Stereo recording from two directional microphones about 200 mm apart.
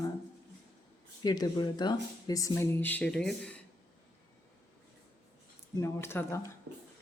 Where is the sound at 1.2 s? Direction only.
20° left (ahead or behind).